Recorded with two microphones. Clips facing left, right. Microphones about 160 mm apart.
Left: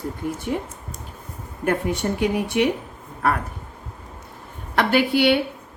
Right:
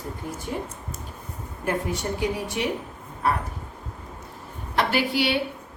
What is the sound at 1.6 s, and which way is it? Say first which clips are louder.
Speech: left 4 dB; 60° left (ahead or behind).